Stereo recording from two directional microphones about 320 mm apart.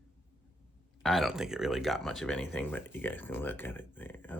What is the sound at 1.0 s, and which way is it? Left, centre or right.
Speech, centre.